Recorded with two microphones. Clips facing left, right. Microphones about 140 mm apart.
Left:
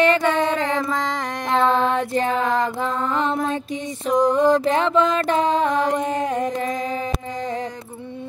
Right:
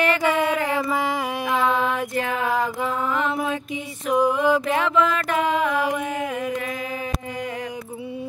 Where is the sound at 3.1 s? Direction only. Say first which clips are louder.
Left 3 dB; 35° left (ahead or behind).